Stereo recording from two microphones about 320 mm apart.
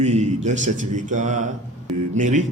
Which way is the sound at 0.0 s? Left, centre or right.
Right.